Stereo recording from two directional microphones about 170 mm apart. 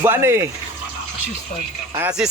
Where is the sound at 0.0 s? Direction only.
15° right (ahead or behind).